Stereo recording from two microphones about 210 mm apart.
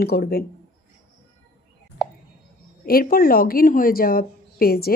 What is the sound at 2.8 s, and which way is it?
Speech, 45° left (ahead or behind).